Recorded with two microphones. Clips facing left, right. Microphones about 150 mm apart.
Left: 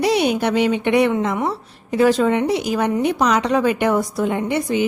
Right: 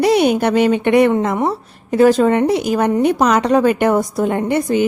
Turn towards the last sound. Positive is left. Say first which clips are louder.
# right 4 dB
turn(degrees=-45)  # may be behind; listen again after turning